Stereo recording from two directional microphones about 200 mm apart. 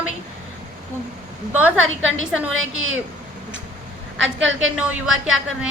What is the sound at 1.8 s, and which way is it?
Speech, 75° right (ahead or behind).